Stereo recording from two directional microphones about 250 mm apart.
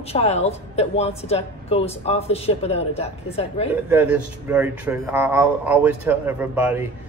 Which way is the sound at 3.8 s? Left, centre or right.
Centre.